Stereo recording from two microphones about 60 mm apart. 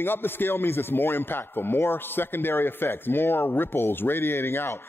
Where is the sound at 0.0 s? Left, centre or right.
Left.